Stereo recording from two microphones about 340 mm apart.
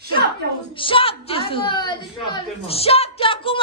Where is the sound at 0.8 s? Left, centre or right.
Centre.